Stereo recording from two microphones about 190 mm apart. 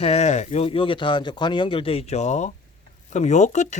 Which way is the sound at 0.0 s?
35° left (ahead or behind).